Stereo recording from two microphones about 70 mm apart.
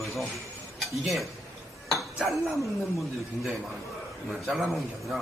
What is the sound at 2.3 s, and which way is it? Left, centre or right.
Speech, centre.